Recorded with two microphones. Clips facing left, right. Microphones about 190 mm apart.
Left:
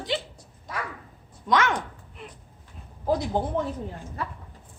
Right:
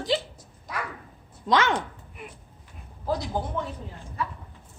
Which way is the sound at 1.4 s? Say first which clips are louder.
Right 1 dB; 30° right (ahead or behind).